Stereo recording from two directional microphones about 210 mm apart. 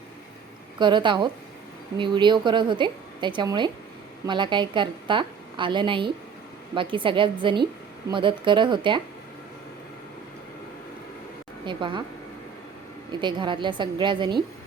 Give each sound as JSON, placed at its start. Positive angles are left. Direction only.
{"t": 0.8, "sound": "a woman's voice", "side_deg": -20}
{"t": 11.6, "sound": "speech", "side_deg": -20}
{"t": 13.1, "sound": "a woman's voice", "side_deg": -20}